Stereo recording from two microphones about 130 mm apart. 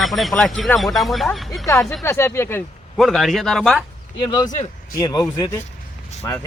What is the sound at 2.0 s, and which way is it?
Speech, 20° left (ahead or behind).